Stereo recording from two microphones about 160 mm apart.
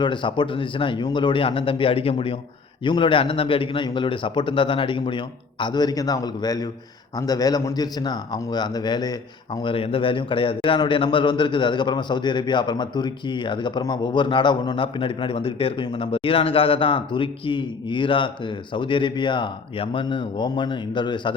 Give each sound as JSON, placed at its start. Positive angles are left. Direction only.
{"t": 0.0, "sound": "a man's voice", "side_deg": 30}
{"t": 9.6, "sound": "a man's voice", "side_deg": 35}